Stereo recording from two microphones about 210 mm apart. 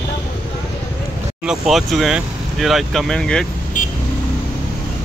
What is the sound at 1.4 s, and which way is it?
Speech, centre (ahead or behind).